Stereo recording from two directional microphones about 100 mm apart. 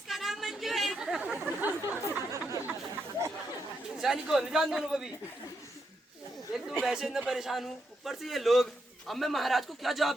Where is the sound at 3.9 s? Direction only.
5° right (ahead or behind).